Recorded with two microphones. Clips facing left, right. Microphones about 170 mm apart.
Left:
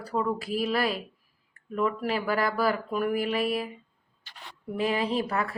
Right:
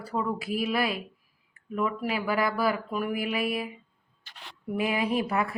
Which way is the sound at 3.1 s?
40° left (ahead or behind).